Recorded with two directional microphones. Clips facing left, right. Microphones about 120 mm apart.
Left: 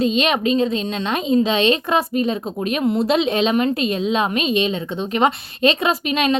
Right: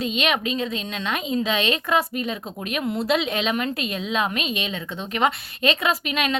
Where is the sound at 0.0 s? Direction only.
35° left (ahead or behind).